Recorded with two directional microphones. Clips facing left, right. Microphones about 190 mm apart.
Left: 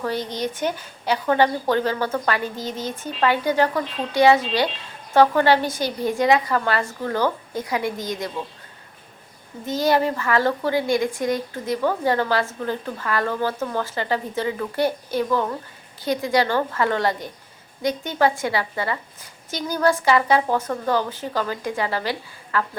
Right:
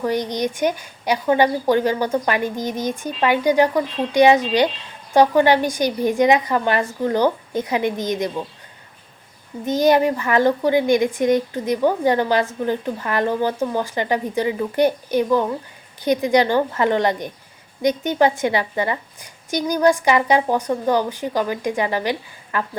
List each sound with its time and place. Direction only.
0.0 s a woman's voice: 15° right (ahead or behind)
9.6 s a woman's voice: 20° right (ahead or behind)